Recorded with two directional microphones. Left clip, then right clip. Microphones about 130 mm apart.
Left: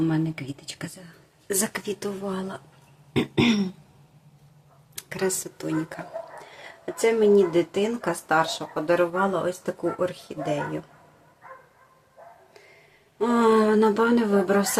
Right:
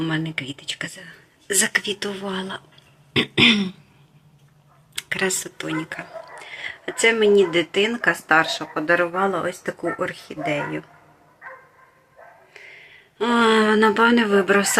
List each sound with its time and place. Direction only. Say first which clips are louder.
0.0 s speech: right 1 dB; 10° left (ahead or behind)
1.5 s throat clearing: right 7 dB; 20° left (ahead or behind)
2.0 s speech: right 3 dB; 10° left (ahead or behind)
3.1 s throat clearing: right 7 dB; 25° left (ahead or behind)
4.9 s speech: right 4 dB; 15° left (ahead or behind)
6.5 s a sound: right 11 dB; 20° left (ahead or behind)
6.8 s speech: right 3 dB; 10° left (ahead or behind)
13.1 s speech: right 3 dB; 10° left (ahead or behind)